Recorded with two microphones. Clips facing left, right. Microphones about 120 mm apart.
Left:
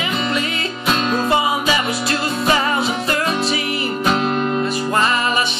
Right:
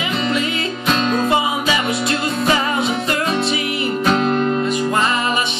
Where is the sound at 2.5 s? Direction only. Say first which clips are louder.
Left 1 dB; 30° left (ahead or behind).